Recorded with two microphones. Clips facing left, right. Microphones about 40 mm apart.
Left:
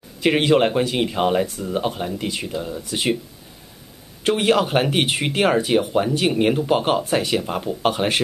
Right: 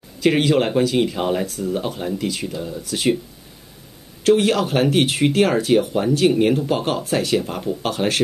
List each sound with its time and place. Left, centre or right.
0.2 s speech: centre
4.2 s speech: centre